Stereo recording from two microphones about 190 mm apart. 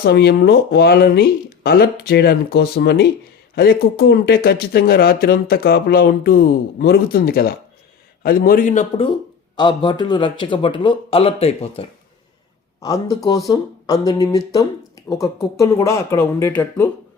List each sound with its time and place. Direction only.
0.0 s speech: 60° left (ahead or behind); by 9.0 s 40° left (ahead or behind)
9.6 s speech: 25° left (ahead or behind)
12.8 s speech: 20° left (ahead or behind)